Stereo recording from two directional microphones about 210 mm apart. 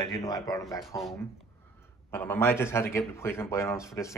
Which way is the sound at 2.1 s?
10° left (ahead or behind).